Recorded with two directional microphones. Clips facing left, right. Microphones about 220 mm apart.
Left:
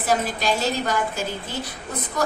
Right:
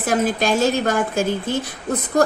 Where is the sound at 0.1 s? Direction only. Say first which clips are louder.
Right 4 dB; 50° right (ahead or behind).